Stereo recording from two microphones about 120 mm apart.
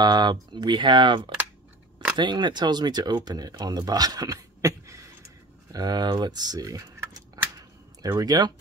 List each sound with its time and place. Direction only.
0.0 s speech: 35° right (ahead or behind)
5.7 s a sound: 35° right (ahead or behind)
8.2 s speech: 35° right (ahead or behind)